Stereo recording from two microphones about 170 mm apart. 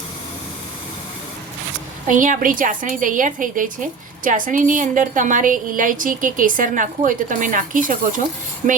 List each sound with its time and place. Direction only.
2.0 s a woman's voice: 50° right (ahead or behind)